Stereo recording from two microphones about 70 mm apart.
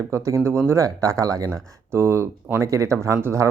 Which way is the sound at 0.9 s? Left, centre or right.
Right.